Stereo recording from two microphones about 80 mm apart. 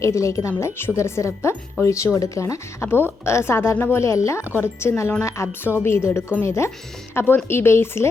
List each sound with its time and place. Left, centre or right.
0.0 s speech: left
2.9 s speech: left